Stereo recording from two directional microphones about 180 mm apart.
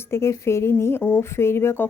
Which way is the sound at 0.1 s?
15° left (ahead or behind).